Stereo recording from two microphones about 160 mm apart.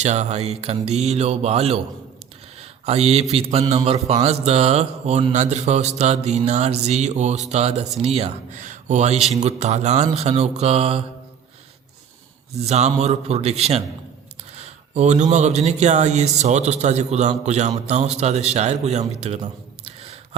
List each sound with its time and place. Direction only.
0.0 s speech: 45° right (ahead or behind)
2.6 s a sound: 40° right (ahead or behind)
3.3 s speech: 40° right (ahead or behind)
12.6 s a man's voice: 45° right (ahead or behind)